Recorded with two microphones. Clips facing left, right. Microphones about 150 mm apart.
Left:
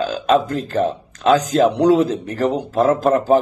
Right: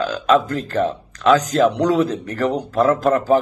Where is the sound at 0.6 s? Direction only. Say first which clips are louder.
Left 1 dB; 35° left (ahead or behind).